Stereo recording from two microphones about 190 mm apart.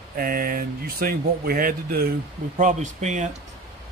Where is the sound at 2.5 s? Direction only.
40° right (ahead or behind).